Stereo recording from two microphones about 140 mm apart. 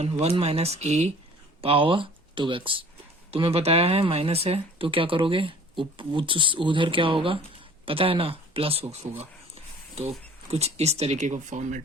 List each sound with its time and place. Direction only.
0.0 s speech: 50° right (ahead or behind)
1.6 s speech: 40° right (ahead or behind)
10.5 s speech: 50° right (ahead or behind)